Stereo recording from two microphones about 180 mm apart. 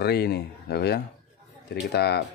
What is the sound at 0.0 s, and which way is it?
Speech, 65° left (ahead or behind).